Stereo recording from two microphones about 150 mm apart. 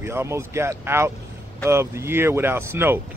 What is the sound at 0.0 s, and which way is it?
Speech, 15° right (ahead or behind).